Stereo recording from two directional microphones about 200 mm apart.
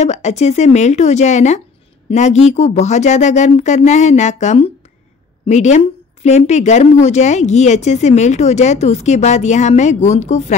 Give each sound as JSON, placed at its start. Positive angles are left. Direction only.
{"t": 0.0, "sound": "a woman's voice", "side_deg": 35}